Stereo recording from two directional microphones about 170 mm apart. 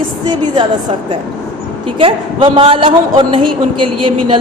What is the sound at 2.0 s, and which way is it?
A woman's voice, 30° right (ahead or behind).